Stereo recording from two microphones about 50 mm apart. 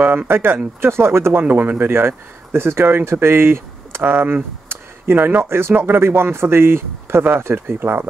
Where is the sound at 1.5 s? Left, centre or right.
Right.